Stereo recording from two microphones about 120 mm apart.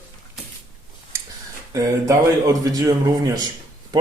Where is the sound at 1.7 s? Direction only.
25° right (ahead or behind).